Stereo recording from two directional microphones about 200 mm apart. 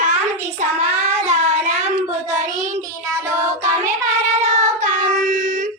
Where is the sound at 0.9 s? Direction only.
35° right (ahead or behind).